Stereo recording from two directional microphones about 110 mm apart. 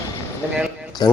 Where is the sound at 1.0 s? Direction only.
35° left (ahead or behind).